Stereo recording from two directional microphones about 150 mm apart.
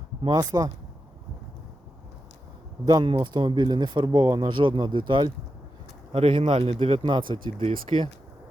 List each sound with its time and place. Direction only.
0.2 s speech: 30° right (ahead or behind)
2.8 s speech: 30° right (ahead or behind)
7.9 s speech: 45° right (ahead or behind)